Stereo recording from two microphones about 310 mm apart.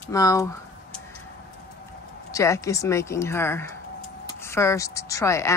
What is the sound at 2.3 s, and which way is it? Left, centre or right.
A woman's voice, centre.